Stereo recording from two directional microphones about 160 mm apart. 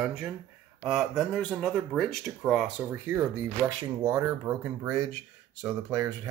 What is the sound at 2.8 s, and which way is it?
Speech, 15° right (ahead or behind).